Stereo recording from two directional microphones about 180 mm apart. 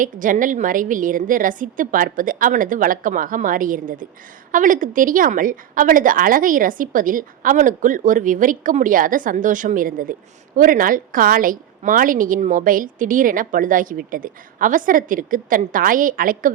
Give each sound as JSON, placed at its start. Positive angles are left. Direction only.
{"t": 0.0, "sound": "a woman's voice", "side_deg": -50}